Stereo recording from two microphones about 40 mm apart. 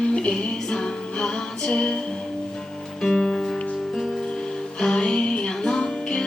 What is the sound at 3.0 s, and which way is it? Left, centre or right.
Music, centre.